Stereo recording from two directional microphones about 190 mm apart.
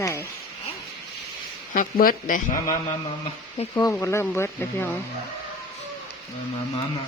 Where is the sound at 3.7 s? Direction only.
15° left (ahead or behind).